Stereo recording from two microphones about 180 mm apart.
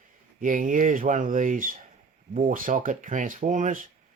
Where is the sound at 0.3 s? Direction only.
50° right (ahead or behind).